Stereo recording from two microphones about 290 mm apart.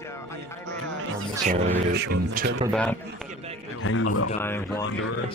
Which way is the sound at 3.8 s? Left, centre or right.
Left.